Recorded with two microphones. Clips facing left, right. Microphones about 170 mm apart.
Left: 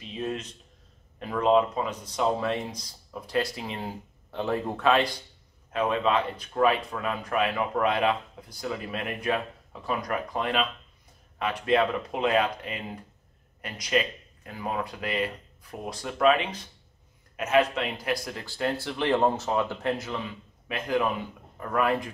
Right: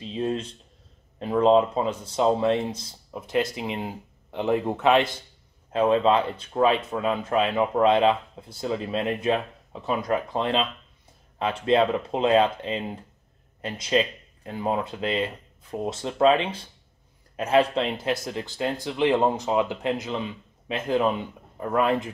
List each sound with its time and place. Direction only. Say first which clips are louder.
0.0 s speech: right 5 dB; 30° right (ahead or behind)